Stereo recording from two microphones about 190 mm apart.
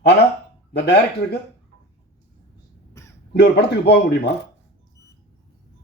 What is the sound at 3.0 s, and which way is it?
Crow, 15° left (ahead or behind).